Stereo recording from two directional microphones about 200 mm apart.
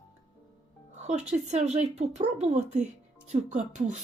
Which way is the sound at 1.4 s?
35° right (ahead or behind).